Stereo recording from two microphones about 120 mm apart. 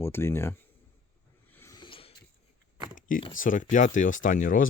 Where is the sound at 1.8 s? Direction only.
50° left (ahead or behind).